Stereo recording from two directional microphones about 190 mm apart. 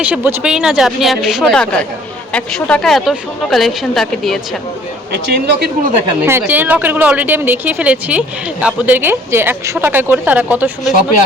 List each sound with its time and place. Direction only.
0.0 s a woman's voice: 5° right (ahead or behind)
5.1 s speech: 60° right (ahead or behind)
6.4 s speech: 10° right (ahead or behind)